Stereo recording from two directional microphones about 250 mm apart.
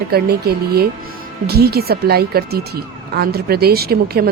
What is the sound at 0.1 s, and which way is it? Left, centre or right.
Speech, right.